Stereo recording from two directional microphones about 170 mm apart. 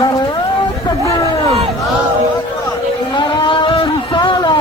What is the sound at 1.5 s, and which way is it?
Crowd, 35° right (ahead or behind).